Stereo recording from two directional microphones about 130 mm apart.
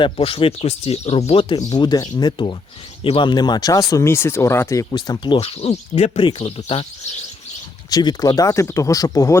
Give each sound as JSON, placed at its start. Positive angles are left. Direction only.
{"t": 0.0, "sound": "speech", "side_deg": 45}
{"t": 7.9, "sound": "speech", "side_deg": 30}